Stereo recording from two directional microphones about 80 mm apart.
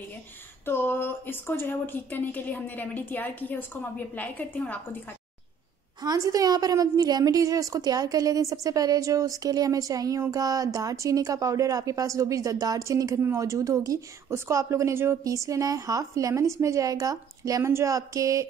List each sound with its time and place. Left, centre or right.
0.7 s speech: left
6.0 s a woman's voice: right